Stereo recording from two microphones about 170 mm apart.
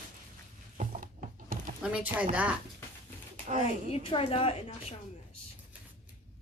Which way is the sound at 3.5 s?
35° left (ahead or behind).